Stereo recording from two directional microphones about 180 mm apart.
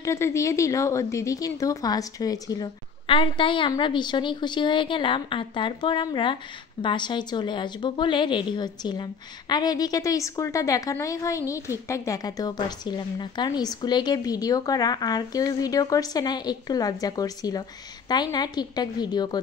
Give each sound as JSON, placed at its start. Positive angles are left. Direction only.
{"t": 0.0, "sound": "a woman's voice", "side_deg": 15}